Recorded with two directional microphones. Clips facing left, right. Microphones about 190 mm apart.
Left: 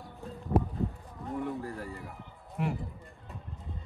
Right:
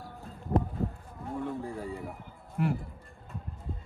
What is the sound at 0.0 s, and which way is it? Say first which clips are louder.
Music: left 1 dB; 5° left (ahead or behind).